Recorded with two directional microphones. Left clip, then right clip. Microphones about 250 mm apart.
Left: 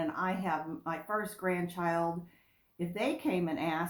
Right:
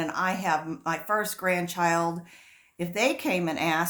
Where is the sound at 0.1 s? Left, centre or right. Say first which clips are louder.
Right 7 dB; right.